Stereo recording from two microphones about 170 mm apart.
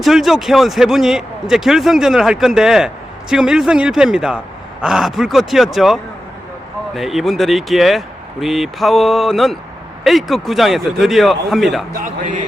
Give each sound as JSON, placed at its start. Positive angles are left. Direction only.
{"t": 0.0, "sound": "speech", "side_deg": 0}
{"t": 12.0, "sound": "speech", "side_deg": -50}